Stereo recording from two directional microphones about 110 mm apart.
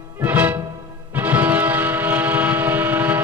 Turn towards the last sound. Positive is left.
turn(degrees=-15)  # may be behind; listen again after turning